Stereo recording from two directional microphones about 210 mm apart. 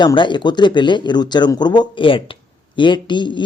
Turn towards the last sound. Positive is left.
turn(degrees=20)  # may be behind; listen again after turning